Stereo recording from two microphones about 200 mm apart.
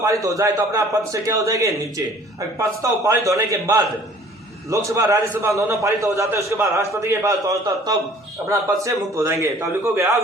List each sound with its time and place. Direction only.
0.0 s a man's voice: 15° right (ahead or behind)